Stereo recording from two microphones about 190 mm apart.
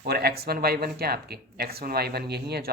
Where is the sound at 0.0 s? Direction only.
55° right (ahead or behind).